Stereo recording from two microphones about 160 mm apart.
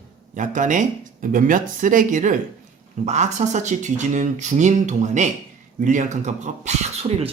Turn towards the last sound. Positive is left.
turn(degrees=-40)  # may be behind; listen again after turning